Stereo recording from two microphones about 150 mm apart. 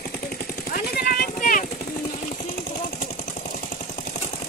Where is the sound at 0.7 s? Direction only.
85° left; by 1.7 s 65° left (ahead or behind).